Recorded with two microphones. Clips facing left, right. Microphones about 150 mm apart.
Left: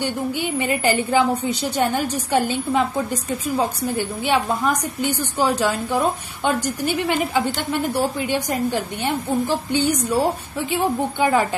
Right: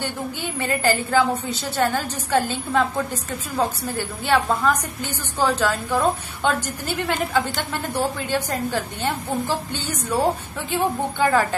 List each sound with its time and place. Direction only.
0.0 s a woman's voice: 15° left (ahead or behind)